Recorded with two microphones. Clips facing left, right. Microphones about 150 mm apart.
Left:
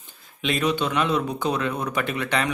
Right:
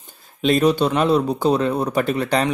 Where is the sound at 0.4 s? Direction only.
35° right (ahead or behind).